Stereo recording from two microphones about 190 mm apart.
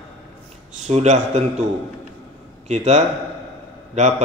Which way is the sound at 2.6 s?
35° right (ahead or behind).